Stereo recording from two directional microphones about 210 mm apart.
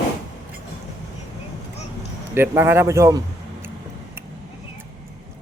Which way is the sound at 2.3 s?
10° right (ahead or behind).